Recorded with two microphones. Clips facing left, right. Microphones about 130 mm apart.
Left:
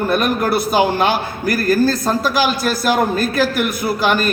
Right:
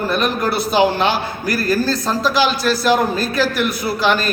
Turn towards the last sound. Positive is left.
turn(degrees=50)  # may be behind; listen again after turning